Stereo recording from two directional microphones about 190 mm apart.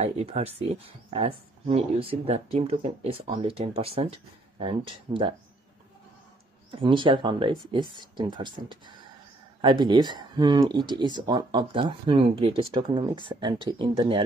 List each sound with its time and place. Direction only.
0.0 s speech: 35° right (ahead or behind)
6.8 s speech: 25° right (ahead or behind)